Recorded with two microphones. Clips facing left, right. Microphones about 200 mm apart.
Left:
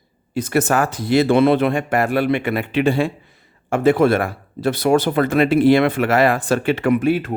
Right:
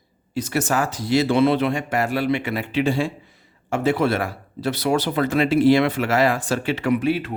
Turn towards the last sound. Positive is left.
turn(degrees=45)  # may be behind; listen again after turning